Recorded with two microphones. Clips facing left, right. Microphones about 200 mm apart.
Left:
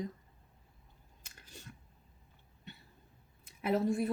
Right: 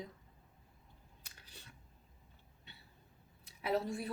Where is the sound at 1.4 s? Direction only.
45° left (ahead or behind).